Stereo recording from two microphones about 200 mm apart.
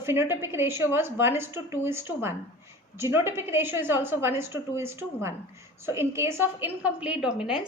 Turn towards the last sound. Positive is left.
turn(degrees=-5)  # may be behind; listen again after turning